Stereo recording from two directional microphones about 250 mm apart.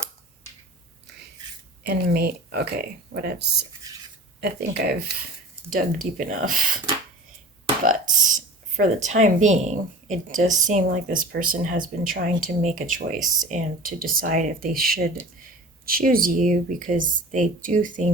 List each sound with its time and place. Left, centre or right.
1.9 s speech: right
7.9 s speech: right